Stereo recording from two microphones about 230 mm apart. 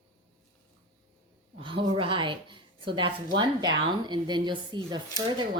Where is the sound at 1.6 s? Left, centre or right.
Right.